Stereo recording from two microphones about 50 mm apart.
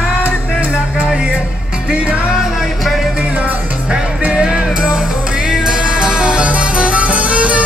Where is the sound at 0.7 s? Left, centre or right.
Centre.